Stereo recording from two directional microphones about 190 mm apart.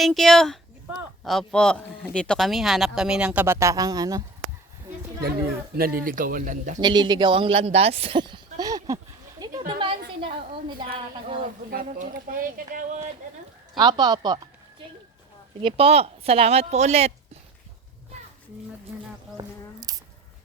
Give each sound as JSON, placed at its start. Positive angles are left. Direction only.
{"t": 0.0, "sound": "speech", "side_deg": 0}
{"t": 5.7, "sound": "speech", "side_deg": -50}
{"t": 6.7, "sound": "speech", "side_deg": -20}
{"t": 9.4, "sound": "a sound", "side_deg": -25}
{"t": 10.2, "sound": "speech", "side_deg": -25}
{"t": 11.7, "sound": "speech", "side_deg": -50}
{"t": 13.7, "sound": "speech", "side_deg": -20}
{"t": 15.6, "sound": "speech", "side_deg": -30}
{"t": 19.4, "sound": "a sound", "side_deg": -20}